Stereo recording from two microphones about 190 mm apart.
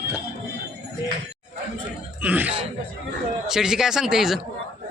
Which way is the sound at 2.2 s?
10° right (ahead or behind).